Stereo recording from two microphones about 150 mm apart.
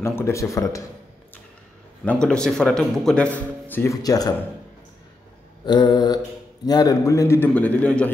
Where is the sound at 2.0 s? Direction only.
10° left (ahead or behind); by 4.3 s 25° left (ahead or behind).